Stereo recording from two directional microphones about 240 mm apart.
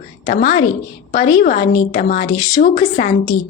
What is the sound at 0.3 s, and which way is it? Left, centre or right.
A woman's voice, left.